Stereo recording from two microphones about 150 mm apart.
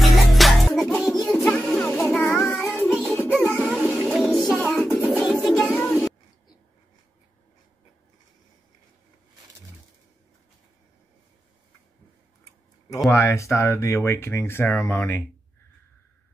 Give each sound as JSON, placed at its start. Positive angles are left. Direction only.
{"t": 0.0, "sound": "music", "side_deg": 0}
{"t": 2.1, "sound": "child singing", "side_deg": 5}
{"t": 2.5, "sound": "music", "side_deg": 0}
{"t": 13.1, "sound": "speech", "side_deg": 20}